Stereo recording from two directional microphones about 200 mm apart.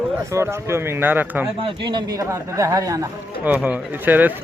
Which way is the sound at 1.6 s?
25° right (ahead or behind).